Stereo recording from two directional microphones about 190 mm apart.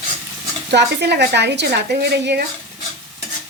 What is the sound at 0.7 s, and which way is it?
A woman's voice, 60° right (ahead or behind).